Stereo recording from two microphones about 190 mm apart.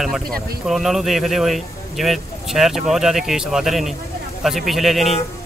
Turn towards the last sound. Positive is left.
turn(degrees=0)  # may be behind; listen again after turning